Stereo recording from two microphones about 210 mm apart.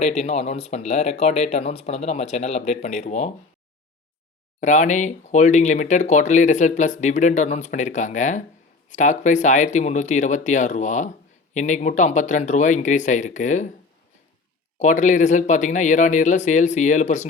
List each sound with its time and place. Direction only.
0.0 s speech: 30° left (ahead or behind)
4.6 s speech: 35° left (ahead or behind)
14.8 s speech: 35° left (ahead or behind)